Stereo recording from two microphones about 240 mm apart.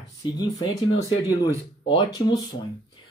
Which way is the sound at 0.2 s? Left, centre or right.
Centre.